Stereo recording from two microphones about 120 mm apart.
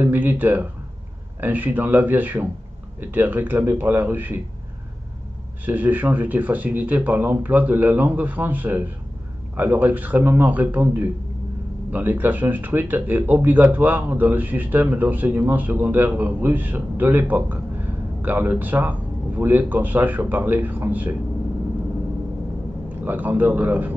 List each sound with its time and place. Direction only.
0.0 s speech: 15° right (ahead or behind)
5.7 s speech: 15° right (ahead or behind)
23.0 s speech: 15° right (ahead or behind)